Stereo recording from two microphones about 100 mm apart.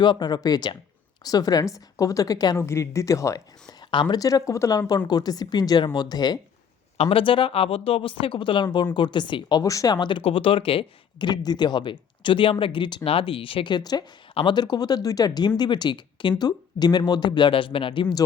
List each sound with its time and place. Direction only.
0.0 s speech: 45° left (ahead or behind)
2.6 s speech: 25° left (ahead or behind); by 4.2 s 50° left (ahead or behind)
4.2 s speech: 35° left (ahead or behind)
6.9 s speech: 80° left; by 9.9 s 35° left (ahead or behind)
9.9 s speech: 50° left (ahead or behind)
11.3 s speech: 45° left (ahead or behind)
13.1 s speech: 65° left (ahead or behind)
13.7 s speech: 45° left (ahead or behind)